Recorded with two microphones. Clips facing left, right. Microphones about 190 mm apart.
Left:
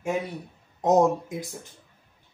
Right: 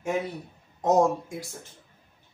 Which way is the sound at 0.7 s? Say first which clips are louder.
Left 2 dB; 20° left (ahead or behind).